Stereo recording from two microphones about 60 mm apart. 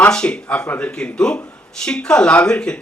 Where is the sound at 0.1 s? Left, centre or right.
Centre.